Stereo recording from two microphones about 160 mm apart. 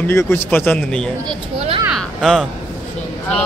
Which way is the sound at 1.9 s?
Centre (ahead or behind).